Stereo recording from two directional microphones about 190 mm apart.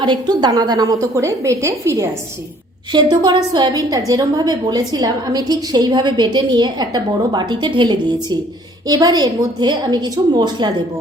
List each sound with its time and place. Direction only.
0.0 s a woman's voice: 25° right (ahead or behind)